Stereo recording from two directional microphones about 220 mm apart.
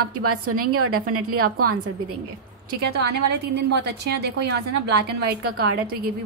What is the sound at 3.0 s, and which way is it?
A woman's voice, 50° right (ahead or behind).